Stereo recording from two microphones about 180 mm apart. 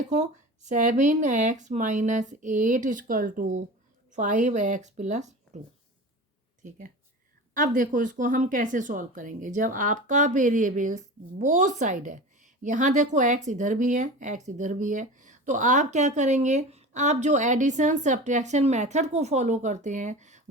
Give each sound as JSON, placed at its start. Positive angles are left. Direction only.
{"t": 0.1, "sound": "speech", "side_deg": -40}